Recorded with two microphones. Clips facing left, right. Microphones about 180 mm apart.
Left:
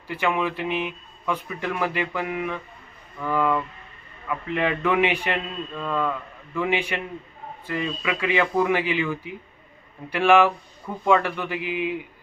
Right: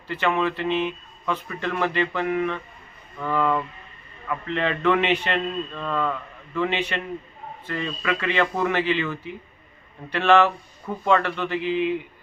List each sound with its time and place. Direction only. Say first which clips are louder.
0.1 s a man's voice: right 1 dB; 10° left (ahead or behind)